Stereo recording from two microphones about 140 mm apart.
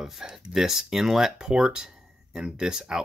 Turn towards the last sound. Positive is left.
turn(degrees=-5)  # may be behind; listen again after turning